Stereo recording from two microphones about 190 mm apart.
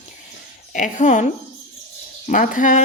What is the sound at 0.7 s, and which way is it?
Speech, 40° left (ahead or behind).